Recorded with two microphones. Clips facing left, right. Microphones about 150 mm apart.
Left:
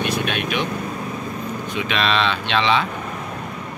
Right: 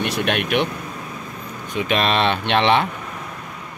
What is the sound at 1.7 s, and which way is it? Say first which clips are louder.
Speech: right 3 dB; 45° right (ahead or behind).